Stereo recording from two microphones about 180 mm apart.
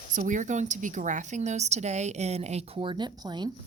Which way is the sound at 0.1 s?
45° right (ahead or behind).